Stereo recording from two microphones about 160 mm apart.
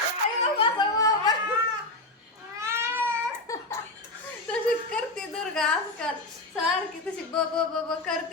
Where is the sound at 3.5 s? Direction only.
20° left (ahead or behind).